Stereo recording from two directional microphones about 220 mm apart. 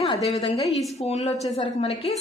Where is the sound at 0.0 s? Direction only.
25° left (ahead or behind).